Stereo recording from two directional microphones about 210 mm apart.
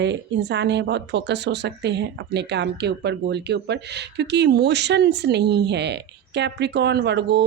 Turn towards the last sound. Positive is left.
turn(degrees=-55)  # may be behind; listen again after turning